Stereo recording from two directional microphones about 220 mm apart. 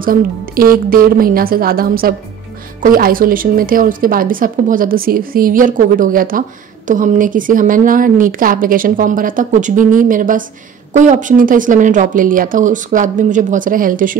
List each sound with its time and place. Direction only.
0.0 s speech: 40° right (ahead or behind)